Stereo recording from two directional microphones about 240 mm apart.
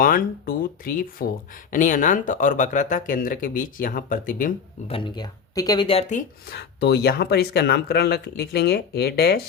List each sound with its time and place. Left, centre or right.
0.0 s speech: left
4.9 s speech: left